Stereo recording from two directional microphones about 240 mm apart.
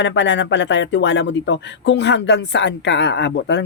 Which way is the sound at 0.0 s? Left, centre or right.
Left.